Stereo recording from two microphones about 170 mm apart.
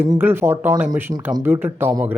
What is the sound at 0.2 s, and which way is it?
Speech, 10° right (ahead or behind).